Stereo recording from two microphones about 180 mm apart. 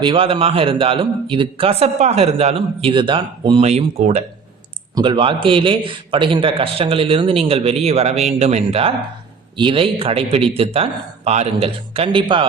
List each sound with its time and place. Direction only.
0.0 s a man's voice: 30° right (ahead or behind)